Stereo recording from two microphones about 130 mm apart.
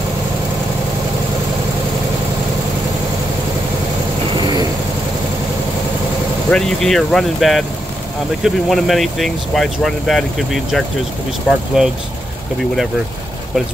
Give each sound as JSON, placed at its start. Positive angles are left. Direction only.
{"t": 4.4, "sound": "vehicle", "side_deg": -30}
{"t": 6.5, "sound": "speech", "side_deg": 5}